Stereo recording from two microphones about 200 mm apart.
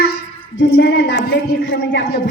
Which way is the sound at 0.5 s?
55° left (ahead or behind).